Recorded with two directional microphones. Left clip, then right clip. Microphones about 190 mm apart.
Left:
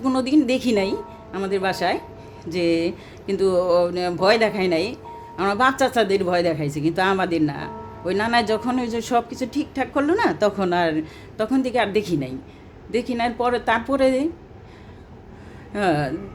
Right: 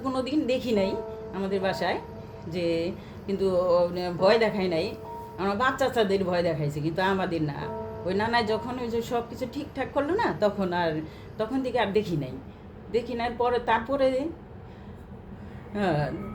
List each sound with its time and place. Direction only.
0.0 s speech: 50° left (ahead or behind)
15.7 s speech: 50° left (ahead or behind)